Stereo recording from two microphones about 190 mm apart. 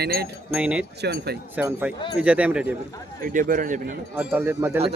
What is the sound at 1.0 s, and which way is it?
Speech, 60° right (ahead or behind).